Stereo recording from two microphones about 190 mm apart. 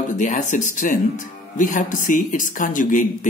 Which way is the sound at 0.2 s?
40° left (ahead or behind).